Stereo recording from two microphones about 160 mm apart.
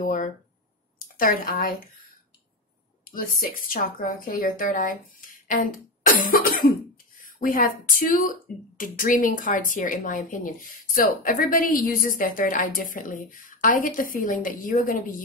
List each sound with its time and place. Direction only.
0.0 s speech: 55° left (ahead or behind)
3.1 s speech: 60° left (ahead or behind)